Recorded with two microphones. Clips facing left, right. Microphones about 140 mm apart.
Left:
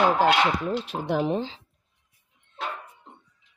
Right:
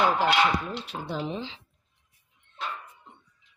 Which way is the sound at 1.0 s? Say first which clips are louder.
Left 8 dB; 65° left (ahead or behind).